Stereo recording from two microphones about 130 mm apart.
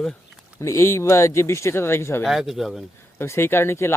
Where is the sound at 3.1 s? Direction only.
20° left (ahead or behind).